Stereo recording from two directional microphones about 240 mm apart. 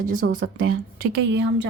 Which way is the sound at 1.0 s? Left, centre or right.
Right.